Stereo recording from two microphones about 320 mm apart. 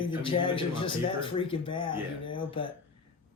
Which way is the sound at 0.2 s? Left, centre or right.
Centre.